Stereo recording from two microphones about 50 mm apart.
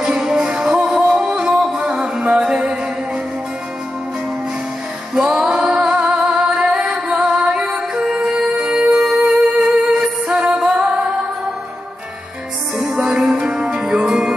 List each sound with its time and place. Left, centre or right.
0.2 s music: centre
5.1 s female singing: centre
6.0 s music: centre
12.7 s music: centre